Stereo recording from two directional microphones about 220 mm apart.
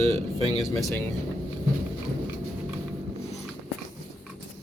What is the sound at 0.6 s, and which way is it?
Speech, centre (ahead or behind).